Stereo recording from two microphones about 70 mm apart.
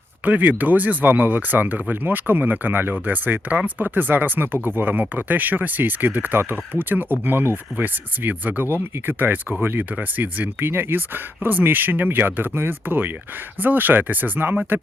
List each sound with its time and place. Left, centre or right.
0.3 s speech: right